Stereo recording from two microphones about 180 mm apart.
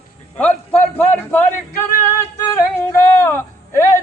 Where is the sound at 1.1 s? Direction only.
10° left (ahead or behind).